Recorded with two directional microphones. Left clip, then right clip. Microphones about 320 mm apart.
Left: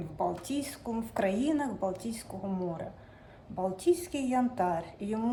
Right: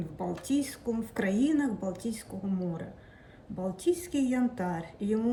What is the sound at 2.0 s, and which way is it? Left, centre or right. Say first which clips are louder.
Speech: right 1 dB; left.